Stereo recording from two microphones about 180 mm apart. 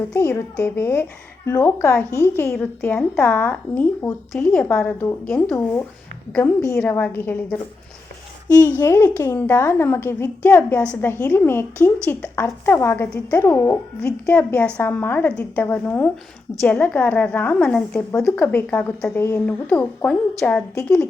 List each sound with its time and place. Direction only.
0.1 s a woman's voice: 15° left (ahead or behind)
6.3 s a woman's voice: 15° left (ahead or behind)
8.8 s a woman's voice: 15° left (ahead or behind)